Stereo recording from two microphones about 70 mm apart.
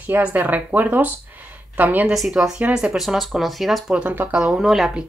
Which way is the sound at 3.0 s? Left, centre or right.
Centre.